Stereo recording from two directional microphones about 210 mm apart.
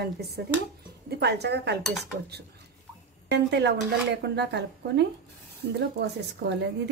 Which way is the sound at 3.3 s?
55° right (ahead or behind).